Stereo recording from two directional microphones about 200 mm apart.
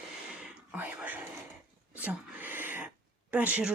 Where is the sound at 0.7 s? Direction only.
10° right (ahead or behind).